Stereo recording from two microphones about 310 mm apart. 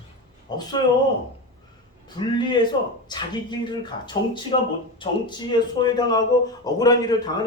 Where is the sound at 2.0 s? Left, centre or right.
Centre.